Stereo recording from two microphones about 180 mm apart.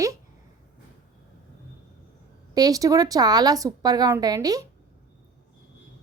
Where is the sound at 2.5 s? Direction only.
20° right (ahead or behind).